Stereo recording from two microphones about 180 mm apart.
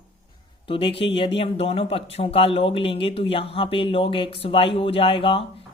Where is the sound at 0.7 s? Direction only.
30° left (ahead or behind).